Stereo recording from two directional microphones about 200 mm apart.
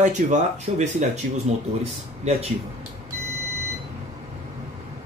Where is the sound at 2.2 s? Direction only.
35° right (ahead or behind).